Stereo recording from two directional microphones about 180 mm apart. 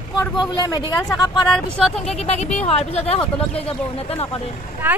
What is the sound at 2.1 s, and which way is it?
Speech, 35° left (ahead or behind).